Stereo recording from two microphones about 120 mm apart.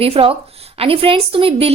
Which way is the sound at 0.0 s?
50° right (ahead or behind).